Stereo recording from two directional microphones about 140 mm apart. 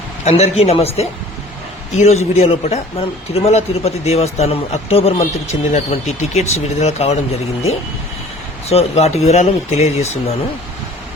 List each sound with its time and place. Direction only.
0.3 s speech: 50° left (ahead or behind)
8.6 s speech: 45° left (ahead or behind)